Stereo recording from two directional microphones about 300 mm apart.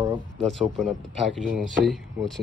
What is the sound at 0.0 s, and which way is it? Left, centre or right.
Speech, centre.